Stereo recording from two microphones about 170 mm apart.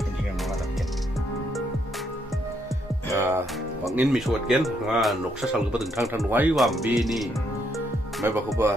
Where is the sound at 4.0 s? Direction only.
Centre (ahead or behind).